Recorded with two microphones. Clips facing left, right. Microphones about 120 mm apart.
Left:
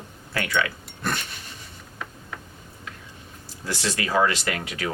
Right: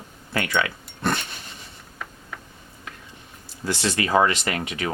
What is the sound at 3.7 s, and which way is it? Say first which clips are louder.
Speech: right 3 dB; 30° right (ahead or behind).